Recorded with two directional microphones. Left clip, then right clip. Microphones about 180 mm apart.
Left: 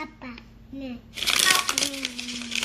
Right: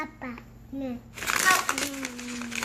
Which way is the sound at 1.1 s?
5° right (ahead or behind).